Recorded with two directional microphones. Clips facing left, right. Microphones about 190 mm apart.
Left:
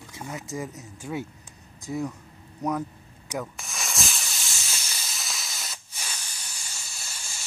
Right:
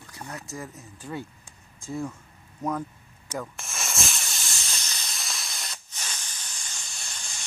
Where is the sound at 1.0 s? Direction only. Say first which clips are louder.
Left 3 dB; 10° left (ahead or behind).